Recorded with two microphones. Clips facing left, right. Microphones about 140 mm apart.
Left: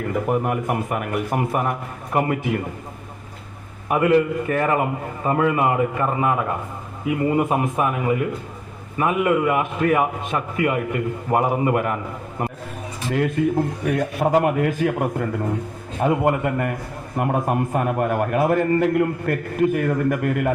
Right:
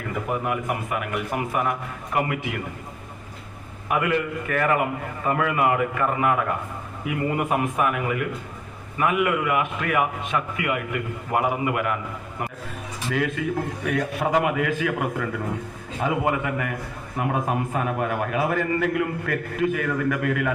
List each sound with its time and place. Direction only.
0.3 s a man's voice: 45° left (ahead or behind)
3.8 s a man's voice: 30° left (ahead or behind)
13.1 s a man's voice: 40° left (ahead or behind)